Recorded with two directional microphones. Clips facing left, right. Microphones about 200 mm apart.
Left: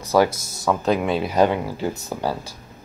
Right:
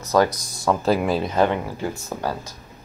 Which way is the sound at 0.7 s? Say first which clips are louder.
Even; centre (ahead or behind).